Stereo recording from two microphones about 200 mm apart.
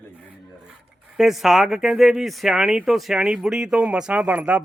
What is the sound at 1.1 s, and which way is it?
Speech, centre (ahead or behind).